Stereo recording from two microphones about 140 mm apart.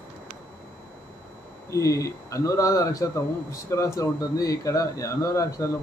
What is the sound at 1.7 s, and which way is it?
Speech, 25° left (ahead or behind).